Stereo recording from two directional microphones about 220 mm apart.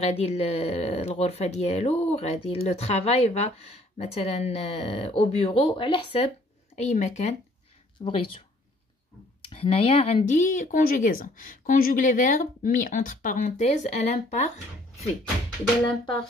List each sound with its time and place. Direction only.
0.0 s speech: 30° left (ahead or behind)
9.5 s speech: 25° left (ahead or behind)